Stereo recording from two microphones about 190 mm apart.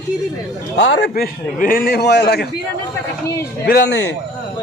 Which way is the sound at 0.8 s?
65° left (ahead or behind).